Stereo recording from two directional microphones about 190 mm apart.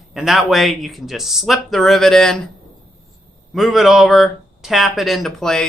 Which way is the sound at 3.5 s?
Centre (ahead or behind).